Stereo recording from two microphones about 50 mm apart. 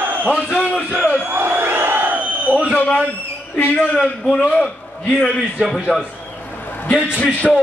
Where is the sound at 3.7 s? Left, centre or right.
Centre.